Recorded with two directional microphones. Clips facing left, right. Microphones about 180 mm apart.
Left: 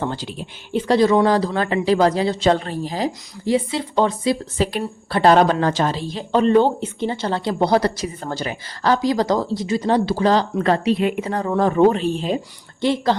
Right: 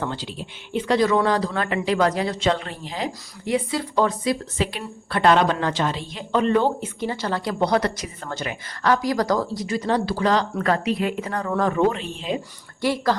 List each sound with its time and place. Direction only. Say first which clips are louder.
0.2 s speech: left 3 dB; 45° left (ahead or behind)
12.8 s speech: left 3 dB; 25° left (ahead or behind)